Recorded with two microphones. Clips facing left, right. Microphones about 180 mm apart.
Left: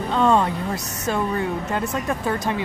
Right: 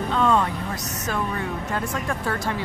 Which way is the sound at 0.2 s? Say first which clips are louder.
Left 3 dB; 30° left (ahead or behind).